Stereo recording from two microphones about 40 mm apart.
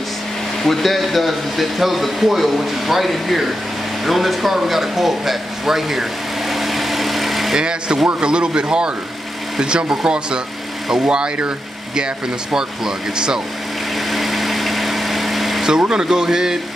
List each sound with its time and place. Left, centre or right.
0.7 s speech: centre
6.5 s vehicle: centre
7.5 s speech: right
12.5 s speech: centre
13.9 s vehicle: centre
15.9 s speech: centre